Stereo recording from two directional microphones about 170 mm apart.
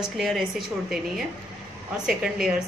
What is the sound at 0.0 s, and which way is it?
A woman's voice, centre (ahead or behind).